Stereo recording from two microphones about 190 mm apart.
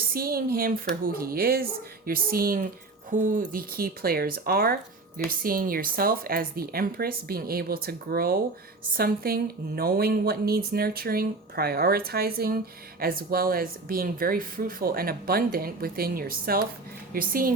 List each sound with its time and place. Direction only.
0.1 s speech: 50° right (ahead or behind)